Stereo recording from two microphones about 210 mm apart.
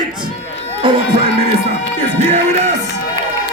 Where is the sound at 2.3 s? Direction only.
35° right (ahead or behind).